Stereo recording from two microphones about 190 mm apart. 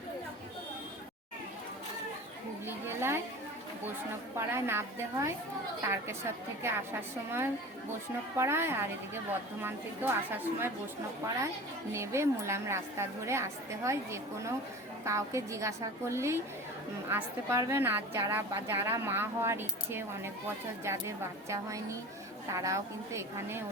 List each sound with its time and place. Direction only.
2.6 s a sound: 10° right (ahead or behind)
4.4 s a woman's voice: 15° right (ahead or behind)
11.9 s a woman's voice: 15° right (ahead or behind)